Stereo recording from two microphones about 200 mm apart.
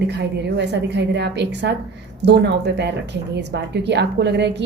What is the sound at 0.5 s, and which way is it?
A woman's voice, 60° right (ahead or behind).